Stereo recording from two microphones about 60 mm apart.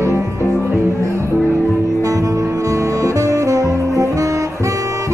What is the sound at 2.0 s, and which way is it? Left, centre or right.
Music, right.